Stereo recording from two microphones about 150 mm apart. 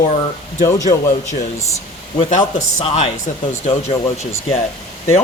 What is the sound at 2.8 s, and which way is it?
Speech, 45° left (ahead or behind).